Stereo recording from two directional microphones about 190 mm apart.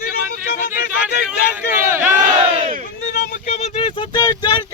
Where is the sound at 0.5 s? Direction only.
50° left (ahead or behind).